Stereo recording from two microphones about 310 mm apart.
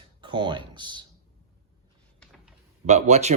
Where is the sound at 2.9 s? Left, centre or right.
Right.